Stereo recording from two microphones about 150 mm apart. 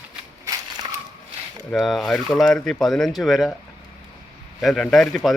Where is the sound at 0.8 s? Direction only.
25° right (ahead or behind).